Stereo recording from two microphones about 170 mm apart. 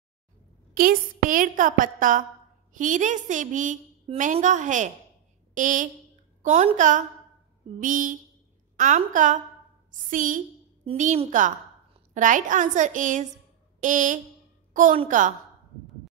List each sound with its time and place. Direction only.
0.7 s a woman's voice: 55° right (ahead or behind)
14.7 s a sound: 50° right (ahead or behind)
15.0 s a woman's voice: 50° right (ahead or behind)